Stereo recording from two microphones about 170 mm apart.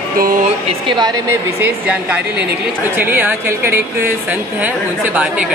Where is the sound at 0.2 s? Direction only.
55° right (ahead or behind).